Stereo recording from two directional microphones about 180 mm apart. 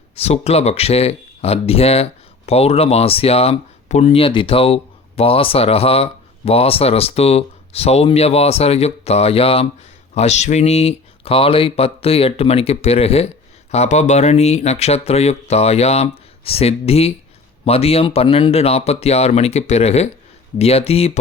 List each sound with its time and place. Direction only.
0.2 s speech: 35° left (ahead or behind)